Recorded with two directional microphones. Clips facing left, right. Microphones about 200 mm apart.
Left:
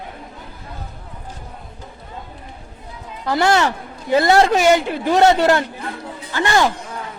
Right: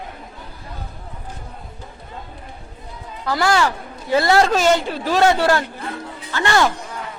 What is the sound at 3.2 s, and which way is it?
A man's voice, 25° left (ahead or behind).